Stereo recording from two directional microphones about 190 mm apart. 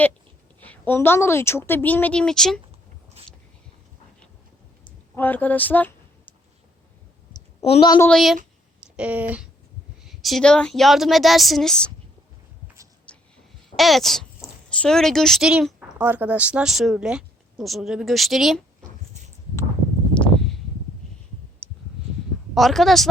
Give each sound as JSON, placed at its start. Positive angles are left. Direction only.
{"t": 0.6, "sound": "a woman's voice", "side_deg": 10}
{"t": 5.1, "sound": "speech", "side_deg": 10}
{"t": 7.3, "sound": "a sound", "side_deg": 30}
{"t": 7.9, "sound": "a woman's voice", "side_deg": 10}
{"t": 9.0, "sound": "speech", "side_deg": -10}
{"t": 13.1, "sound": "a sound", "side_deg": 5}
{"t": 13.7, "sound": "speech", "side_deg": 0}
{"t": 20.1, "sound": "a sound", "side_deg": 5}
{"t": 21.6, "sound": "clicking", "side_deg": 5}
{"t": 22.5, "sound": "speech", "side_deg": 0}